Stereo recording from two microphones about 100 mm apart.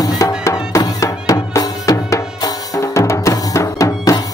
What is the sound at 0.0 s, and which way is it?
Music, 40° left (ahead or behind).